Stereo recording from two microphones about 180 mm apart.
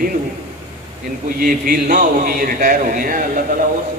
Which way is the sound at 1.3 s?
50° right (ahead or behind).